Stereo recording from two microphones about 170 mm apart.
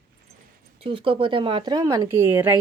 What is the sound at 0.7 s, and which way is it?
Speech, 35° right (ahead or behind).